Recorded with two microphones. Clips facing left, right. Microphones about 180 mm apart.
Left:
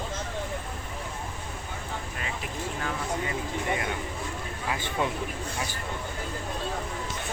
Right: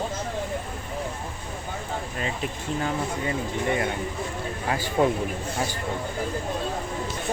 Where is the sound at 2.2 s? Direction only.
30° right (ahead or behind).